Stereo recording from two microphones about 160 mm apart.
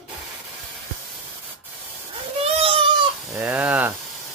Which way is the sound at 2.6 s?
35° right (ahead or behind).